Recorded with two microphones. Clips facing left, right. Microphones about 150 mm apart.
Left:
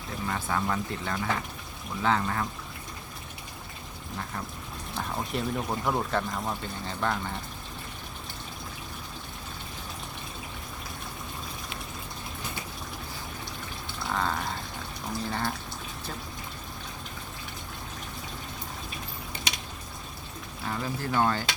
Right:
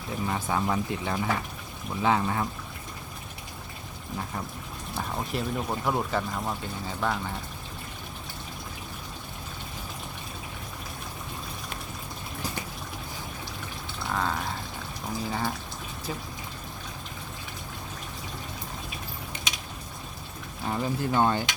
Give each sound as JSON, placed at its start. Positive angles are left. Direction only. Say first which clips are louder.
{"t": 0.3, "sound": "speech", "louder": "right 1 dB", "side_deg": -20}
{"t": 4.9, "sound": "speech", "louder": "even", "side_deg": 0}
{"t": 14.1, "sound": "a sound", "louder": "even", "side_deg": 0}
{"t": 15.3, "sound": "speech", "louder": "right 1 dB", "side_deg": -5}
{"t": 20.7, "sound": "speech", "louder": "right 4 dB", "side_deg": -20}